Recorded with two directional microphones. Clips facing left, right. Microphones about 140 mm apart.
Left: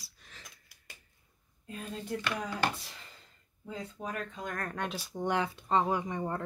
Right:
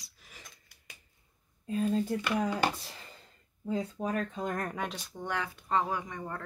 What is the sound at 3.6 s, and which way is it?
Speech, 40° right (ahead or behind).